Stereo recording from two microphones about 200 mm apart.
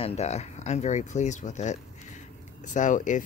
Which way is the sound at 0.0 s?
30° left (ahead or behind).